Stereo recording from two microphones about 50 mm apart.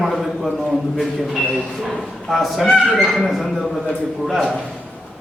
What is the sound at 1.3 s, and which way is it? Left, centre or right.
A man's voice, centre.